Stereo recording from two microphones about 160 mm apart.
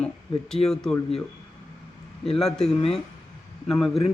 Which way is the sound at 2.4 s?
5° left (ahead or behind).